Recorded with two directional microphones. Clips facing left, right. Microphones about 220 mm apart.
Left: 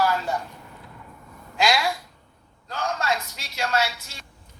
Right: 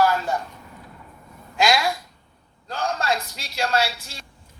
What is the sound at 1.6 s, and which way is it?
Speech, 45° right (ahead or behind).